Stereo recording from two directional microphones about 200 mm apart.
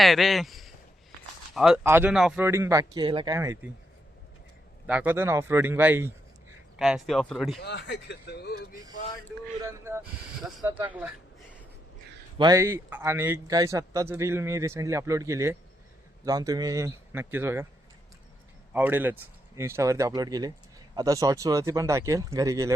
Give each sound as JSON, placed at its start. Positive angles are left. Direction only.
{"t": 0.0, "sound": "speech", "side_deg": 0}
{"t": 4.9, "sound": "speech", "side_deg": -10}
{"t": 7.6, "sound": "speech", "side_deg": 60}
{"t": 9.6, "sound": "speech", "side_deg": -15}
{"t": 12.4, "sound": "speech", "side_deg": -15}
{"t": 18.7, "sound": "speech", "side_deg": -10}